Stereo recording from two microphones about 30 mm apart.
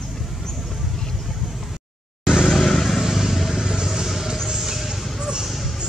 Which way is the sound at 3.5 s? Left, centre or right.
Centre.